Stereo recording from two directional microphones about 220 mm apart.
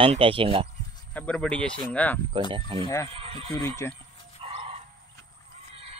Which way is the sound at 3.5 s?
10° left (ahead or behind).